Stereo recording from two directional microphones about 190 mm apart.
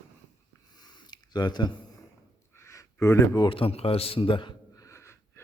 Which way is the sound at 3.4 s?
30° left (ahead or behind).